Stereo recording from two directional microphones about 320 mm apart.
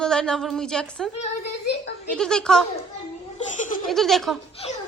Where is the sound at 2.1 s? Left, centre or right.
Centre.